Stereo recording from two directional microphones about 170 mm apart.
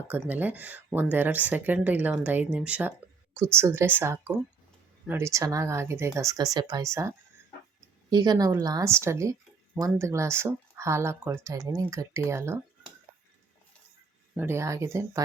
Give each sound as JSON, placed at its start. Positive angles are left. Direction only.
{"t": 0.1, "sound": "speech", "side_deg": -10}
{"t": 8.1, "sound": "a woman's voice", "side_deg": -25}
{"t": 14.3, "sound": "speech", "side_deg": -15}